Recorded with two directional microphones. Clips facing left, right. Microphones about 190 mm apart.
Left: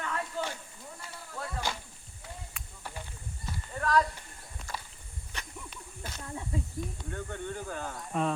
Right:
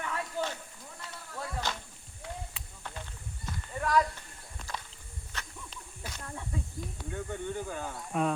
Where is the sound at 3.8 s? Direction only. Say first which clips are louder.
Even; 10° right (ahead or behind).